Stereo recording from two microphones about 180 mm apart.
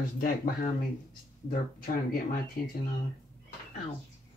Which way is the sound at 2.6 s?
55° left (ahead or behind).